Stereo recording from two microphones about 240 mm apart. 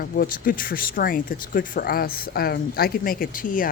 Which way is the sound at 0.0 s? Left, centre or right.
Left.